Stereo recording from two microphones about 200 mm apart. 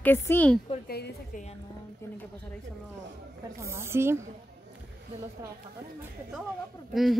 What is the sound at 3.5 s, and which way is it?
Speech, 15° right (ahead or behind).